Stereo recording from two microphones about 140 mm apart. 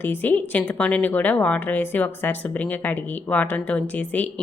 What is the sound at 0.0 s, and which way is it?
A woman's voice, 15° left (ahead or behind).